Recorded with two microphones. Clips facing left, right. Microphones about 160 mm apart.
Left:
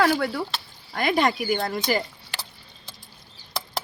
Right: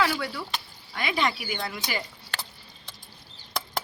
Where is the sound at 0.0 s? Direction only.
50° left (ahead or behind).